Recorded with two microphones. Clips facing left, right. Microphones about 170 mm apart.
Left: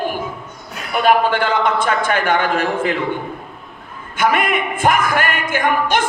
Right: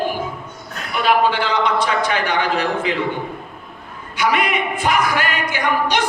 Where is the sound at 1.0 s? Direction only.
50° left (ahead or behind).